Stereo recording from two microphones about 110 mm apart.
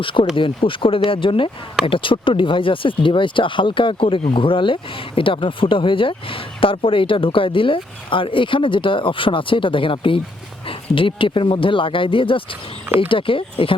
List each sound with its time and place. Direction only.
0.0 s speech: 50° left (ahead or behind)